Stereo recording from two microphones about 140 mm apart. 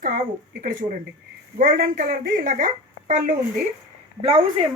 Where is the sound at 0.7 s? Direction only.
80° right; by 3.3 s 60° right (ahead or behind).